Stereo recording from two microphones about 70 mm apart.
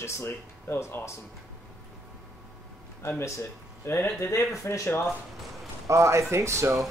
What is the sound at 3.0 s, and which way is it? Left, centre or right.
Speech, left.